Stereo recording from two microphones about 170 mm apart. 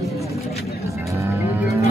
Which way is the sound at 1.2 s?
15° right (ahead or behind).